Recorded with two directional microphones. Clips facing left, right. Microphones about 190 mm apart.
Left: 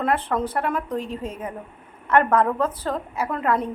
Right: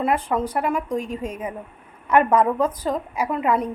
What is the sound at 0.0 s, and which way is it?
A woman's voice, 10° right (ahead or behind).